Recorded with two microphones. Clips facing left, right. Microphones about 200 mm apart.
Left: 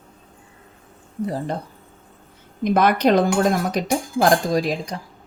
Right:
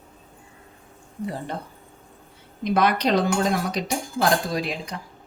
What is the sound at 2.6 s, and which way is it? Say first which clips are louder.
A woman's voice: left 4 dB; 50° left (ahead or behind).